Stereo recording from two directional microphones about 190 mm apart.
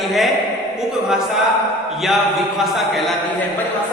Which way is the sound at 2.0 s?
Centre (ahead or behind).